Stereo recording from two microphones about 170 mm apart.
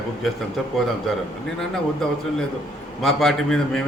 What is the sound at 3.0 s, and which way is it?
Speech, centre (ahead or behind).